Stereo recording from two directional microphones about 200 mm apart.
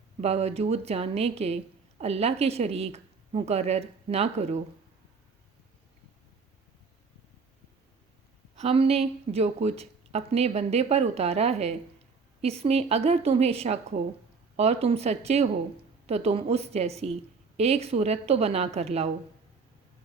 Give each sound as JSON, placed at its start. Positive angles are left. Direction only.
{"t": 0.2, "sound": "speech", "side_deg": -30}
{"t": 8.5, "sound": "speech", "side_deg": -30}